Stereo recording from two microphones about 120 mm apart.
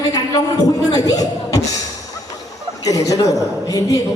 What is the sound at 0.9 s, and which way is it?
Chuckle, 30° left (ahead or behind).